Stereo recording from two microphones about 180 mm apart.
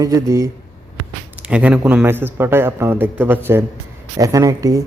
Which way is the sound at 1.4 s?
5° right (ahead or behind).